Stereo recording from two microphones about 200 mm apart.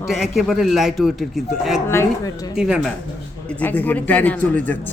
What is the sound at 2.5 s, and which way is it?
Speech, 5° right (ahead or behind).